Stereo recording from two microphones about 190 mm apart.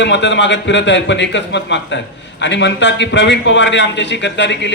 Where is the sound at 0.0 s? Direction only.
70° left (ahead or behind).